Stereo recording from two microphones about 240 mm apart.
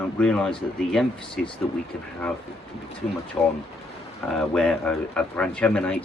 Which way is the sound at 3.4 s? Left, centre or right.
Centre.